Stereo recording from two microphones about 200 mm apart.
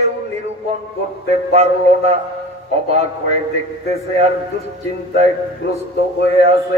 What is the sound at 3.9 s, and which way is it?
Speech, 35° right (ahead or behind).